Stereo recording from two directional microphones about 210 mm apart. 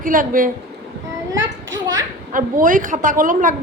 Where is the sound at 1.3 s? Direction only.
15° right (ahead or behind).